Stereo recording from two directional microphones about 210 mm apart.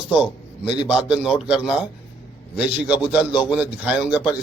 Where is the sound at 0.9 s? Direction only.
5° right (ahead or behind).